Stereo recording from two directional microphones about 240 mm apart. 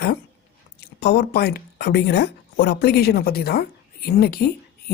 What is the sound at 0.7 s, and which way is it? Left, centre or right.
Speech, left.